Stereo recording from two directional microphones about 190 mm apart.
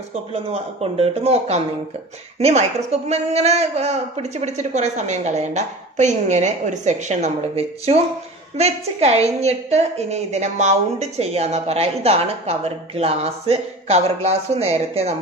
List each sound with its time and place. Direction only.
0.3 s a woman's voice: 30° right (ahead or behind)